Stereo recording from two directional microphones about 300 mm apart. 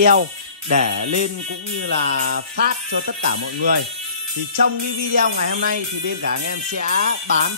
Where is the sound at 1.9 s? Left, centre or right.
Right.